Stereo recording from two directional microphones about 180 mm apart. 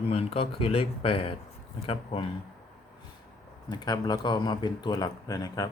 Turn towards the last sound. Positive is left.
turn(degrees=20)  # may be behind; listen again after turning